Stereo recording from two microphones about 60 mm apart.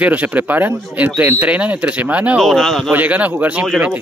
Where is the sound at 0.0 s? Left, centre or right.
Right.